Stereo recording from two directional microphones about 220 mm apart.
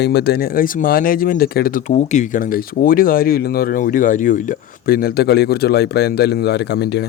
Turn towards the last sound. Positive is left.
turn(degrees=50)  # may be behind; listen again after turning